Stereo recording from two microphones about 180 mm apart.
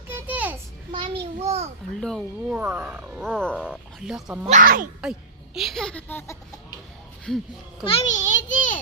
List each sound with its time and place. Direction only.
0.1 s a sound: 10° right (ahead or behind)
0.9 s a sound: 30° right (ahead or behind)
2.0 s speech: centre (ahead or behind)
2.6 s speech: 10° right (ahead or behind)
4.4 s speech: 45° right (ahead or behind)
5.5 s speech: centre (ahead or behind)
7.9 s a child's voice: 35° left (ahead or behind)